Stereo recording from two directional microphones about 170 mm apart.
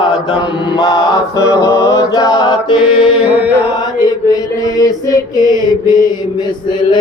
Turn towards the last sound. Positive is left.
turn(degrees=25)  # may be behind; listen again after turning